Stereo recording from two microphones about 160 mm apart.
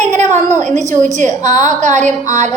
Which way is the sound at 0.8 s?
50° right (ahead or behind).